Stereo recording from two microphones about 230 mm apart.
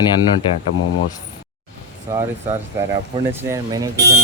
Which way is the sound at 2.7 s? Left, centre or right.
Centre.